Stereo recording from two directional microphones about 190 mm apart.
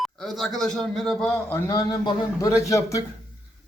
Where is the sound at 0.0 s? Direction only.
Centre (ahead or behind).